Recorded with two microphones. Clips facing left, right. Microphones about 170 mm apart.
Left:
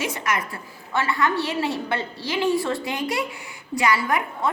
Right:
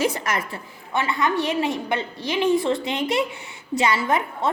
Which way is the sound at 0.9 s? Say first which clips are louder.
Even; 20° right (ahead or behind).